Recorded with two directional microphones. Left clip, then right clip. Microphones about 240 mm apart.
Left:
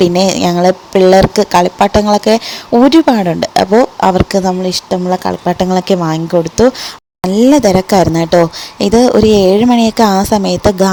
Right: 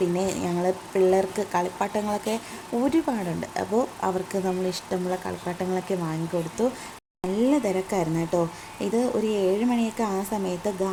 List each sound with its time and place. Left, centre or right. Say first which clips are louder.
0.0 s speech: left 16 dB; left
7.4 s speech: left 16 dB; left